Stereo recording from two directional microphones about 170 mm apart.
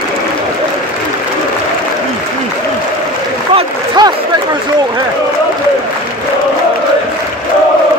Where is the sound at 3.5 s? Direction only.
25° right (ahead or behind).